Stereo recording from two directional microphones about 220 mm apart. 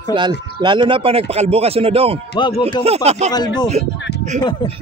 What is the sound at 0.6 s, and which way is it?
Speech, 20° right (ahead or behind).